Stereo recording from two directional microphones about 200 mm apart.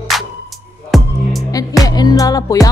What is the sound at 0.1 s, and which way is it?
Music, centre (ahead or behind).